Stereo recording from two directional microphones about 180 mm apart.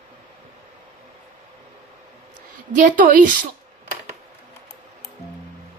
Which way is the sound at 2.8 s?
50° right (ahead or behind).